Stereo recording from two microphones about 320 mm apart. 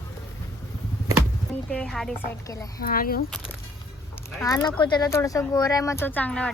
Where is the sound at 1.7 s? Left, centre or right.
Centre.